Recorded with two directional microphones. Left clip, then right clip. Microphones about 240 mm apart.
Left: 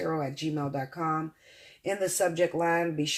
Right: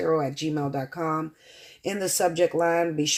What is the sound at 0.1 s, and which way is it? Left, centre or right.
Speech, right.